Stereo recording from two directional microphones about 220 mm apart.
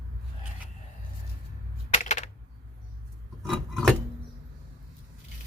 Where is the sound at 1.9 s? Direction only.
35° left (ahead or behind).